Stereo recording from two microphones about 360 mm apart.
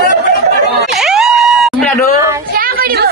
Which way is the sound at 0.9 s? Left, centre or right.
Centre.